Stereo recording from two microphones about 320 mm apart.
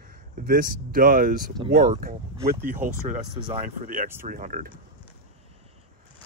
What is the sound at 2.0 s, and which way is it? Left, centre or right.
Speech, right.